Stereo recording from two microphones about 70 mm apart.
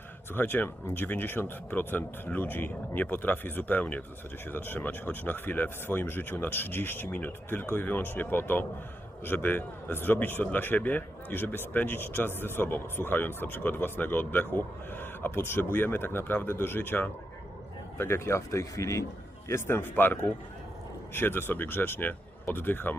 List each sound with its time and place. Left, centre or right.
0.3 s speech: left
19.5 s speech: left